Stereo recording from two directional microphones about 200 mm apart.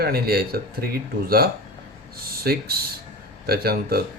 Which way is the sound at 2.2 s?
50° right (ahead or behind).